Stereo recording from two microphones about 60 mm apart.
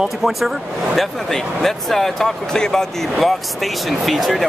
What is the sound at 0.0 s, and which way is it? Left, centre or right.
Speech, centre.